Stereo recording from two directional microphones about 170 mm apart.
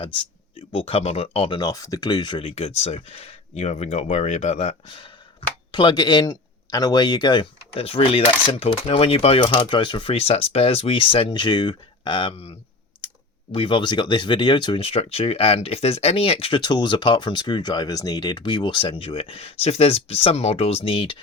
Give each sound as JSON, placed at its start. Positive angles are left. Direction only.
{"t": 0.7, "sound": "speech", "side_deg": 35}